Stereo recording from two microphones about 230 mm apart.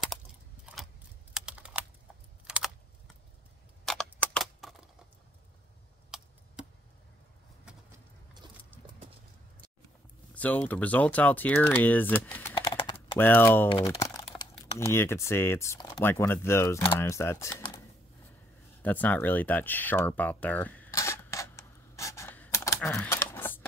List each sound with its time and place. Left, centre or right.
1.3 s typing: centre
2.4 s computer keyboard: centre
3.8 s a sound: centre
6.1 s a sound: centre
8.4 s horse: centre
10.3 s speech: centre
12.5 s typing: centre
12.9 s speech: centre
13.7 s speech: left
14.1 s typing: centre
14.9 s speech: centre
18.8 s a sound: centre